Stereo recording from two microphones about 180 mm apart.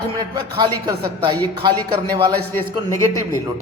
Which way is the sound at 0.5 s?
20° right (ahead or behind).